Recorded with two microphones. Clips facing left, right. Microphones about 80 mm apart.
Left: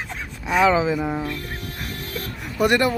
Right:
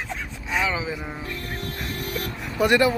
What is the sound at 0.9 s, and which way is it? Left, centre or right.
Speech, left.